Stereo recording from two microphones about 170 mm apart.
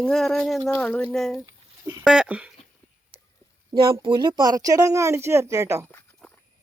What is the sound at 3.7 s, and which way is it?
Speech, 30° right (ahead or behind).